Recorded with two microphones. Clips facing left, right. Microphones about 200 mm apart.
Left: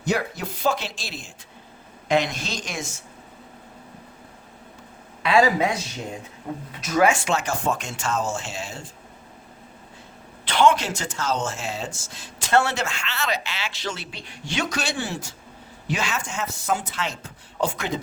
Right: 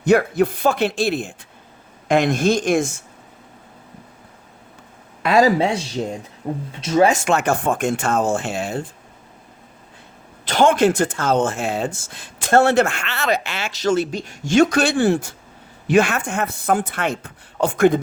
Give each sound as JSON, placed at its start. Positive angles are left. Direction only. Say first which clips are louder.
{"t": 0.0, "sound": "a man's voice", "louder": "right 10 dB", "side_deg": -55}
{"t": 5.2, "sound": "speech", "louder": "right 3 dB", "side_deg": -45}
{"t": 5.5, "sound": "speech", "louder": "right 4 dB", "side_deg": -30}
{"t": 7.2, "sound": "a man's voice", "louder": "right 6 dB", "side_deg": -55}
{"t": 10.4, "sound": "a man's voice", "louder": "right 5 dB", "side_deg": -45}